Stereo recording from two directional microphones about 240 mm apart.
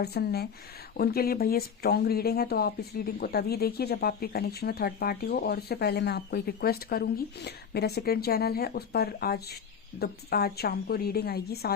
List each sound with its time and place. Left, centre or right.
0.0 s speech: left